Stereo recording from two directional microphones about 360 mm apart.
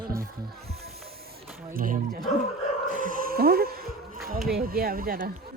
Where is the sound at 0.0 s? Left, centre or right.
Centre.